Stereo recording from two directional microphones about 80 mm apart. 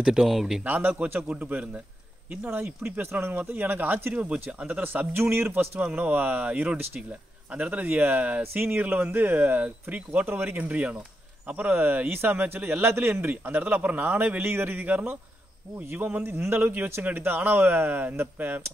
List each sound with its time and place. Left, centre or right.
0.0 s speech: centre
0.7 s a man's voice: right